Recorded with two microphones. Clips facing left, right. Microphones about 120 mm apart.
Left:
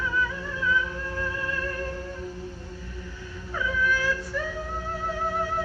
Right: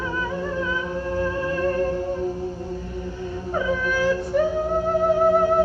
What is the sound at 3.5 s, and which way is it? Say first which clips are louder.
Whale vocalization: right 3 dB; 40° right (ahead or behind).